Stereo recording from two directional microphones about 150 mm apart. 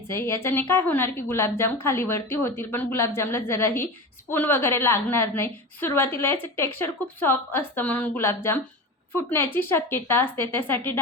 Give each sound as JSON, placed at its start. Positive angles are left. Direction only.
{"t": 0.1, "sound": "a woman's voice", "side_deg": 15}